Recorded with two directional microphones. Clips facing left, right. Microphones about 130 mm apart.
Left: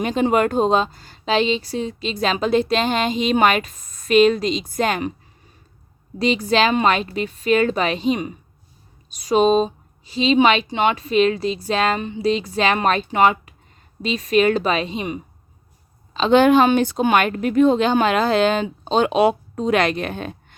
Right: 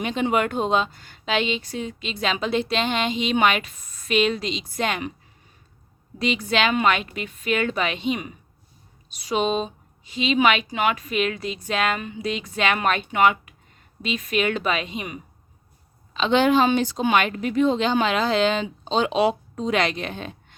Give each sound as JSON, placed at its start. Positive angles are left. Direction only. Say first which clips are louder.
{"t": 0.0, "sound": "speech", "louder": "left 5 dB", "side_deg": 40}
{"t": 6.1, "sound": "speech", "louder": "left 5 dB", "side_deg": 35}
{"t": 16.1, "sound": "a woman's voice", "louder": "left 5 dB", "side_deg": 40}